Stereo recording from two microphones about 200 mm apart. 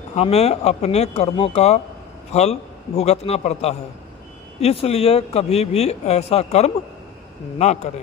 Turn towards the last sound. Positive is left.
turn(degrees=35)  # may be behind; listen again after turning